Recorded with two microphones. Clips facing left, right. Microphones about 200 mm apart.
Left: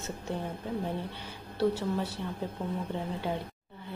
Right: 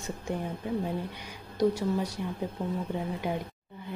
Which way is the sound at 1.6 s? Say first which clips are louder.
Right 2 dB; 15° right (ahead or behind).